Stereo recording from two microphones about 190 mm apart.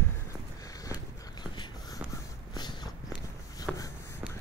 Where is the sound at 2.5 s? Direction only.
20° left (ahead or behind).